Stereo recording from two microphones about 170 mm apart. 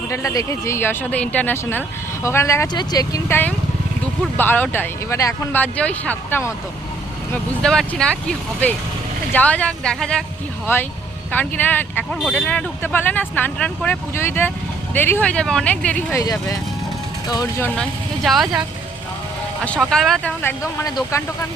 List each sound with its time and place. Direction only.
0.1 s speech: 15° left (ahead or behind)
7.6 s speech: 5° left (ahead or behind)
11.3 s speech: 10° left (ahead or behind)
16.2 s speech: 20° left (ahead or behind)
17.6 s speech: 5° left (ahead or behind)
19.6 s speech: 5° left (ahead or behind)
20.4 s speech: 15° left (ahead or behind)